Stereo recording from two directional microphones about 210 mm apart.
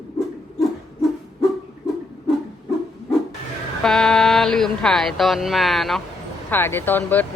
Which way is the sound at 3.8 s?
Centre (ahead or behind).